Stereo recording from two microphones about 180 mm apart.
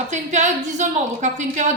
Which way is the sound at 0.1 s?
40° right (ahead or behind).